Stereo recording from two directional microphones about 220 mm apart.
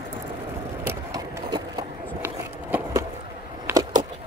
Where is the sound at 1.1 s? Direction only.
15° right (ahead or behind).